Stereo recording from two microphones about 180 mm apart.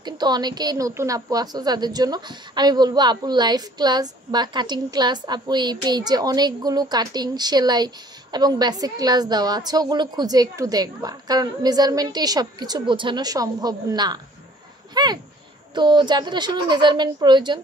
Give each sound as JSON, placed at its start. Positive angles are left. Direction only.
{"t": 0.0, "sound": "a woman's voice", "side_deg": -25}